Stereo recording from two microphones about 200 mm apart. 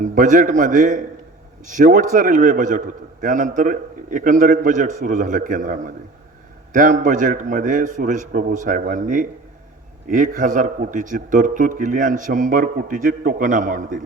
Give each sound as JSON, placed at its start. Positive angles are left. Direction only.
{"t": 0.0, "sound": "a man's voice", "side_deg": -40}